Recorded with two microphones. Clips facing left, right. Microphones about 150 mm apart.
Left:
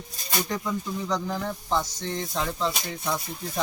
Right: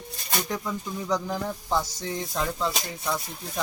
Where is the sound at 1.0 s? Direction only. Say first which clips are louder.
Right 3 dB; 10° right (ahead or behind).